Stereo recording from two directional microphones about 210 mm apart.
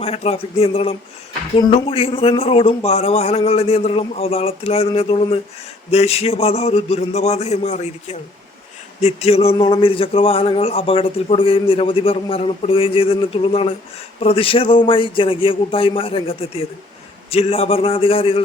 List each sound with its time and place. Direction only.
0.0 s a man's voice: 30° left (ahead or behind)